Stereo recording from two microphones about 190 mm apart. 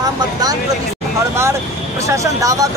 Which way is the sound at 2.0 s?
15° right (ahead or behind).